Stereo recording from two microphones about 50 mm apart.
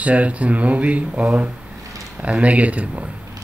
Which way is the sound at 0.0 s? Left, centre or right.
Right.